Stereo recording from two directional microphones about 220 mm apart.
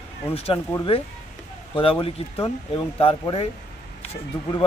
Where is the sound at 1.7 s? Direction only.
25° left (ahead or behind).